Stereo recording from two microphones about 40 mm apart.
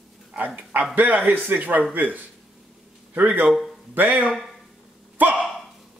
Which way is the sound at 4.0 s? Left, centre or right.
Right.